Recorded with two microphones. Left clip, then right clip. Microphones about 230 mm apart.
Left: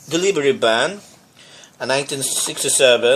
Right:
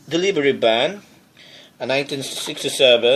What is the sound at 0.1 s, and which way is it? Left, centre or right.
Speech, centre.